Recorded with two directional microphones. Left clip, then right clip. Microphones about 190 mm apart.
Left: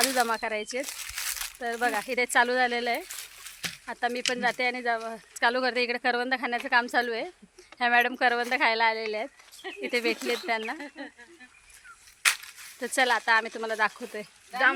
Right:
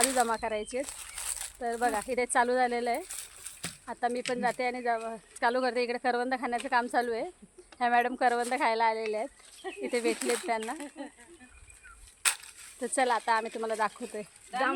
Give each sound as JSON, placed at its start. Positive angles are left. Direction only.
{"t": 0.2, "sound": "speech", "side_deg": 10}
{"t": 0.9, "sound": "crumpling", "side_deg": -15}
{"t": 1.5, "sound": "speech", "side_deg": 0}
{"t": 3.1, "sound": "a sound", "side_deg": -35}
{"t": 3.8, "sound": "speech", "side_deg": 5}
{"t": 10.2, "sound": "speech", "side_deg": 45}
{"t": 10.8, "sound": "speech", "side_deg": -10}
{"t": 12.2, "sound": "a sound", "side_deg": -40}
{"t": 12.8, "sound": "speech", "side_deg": 0}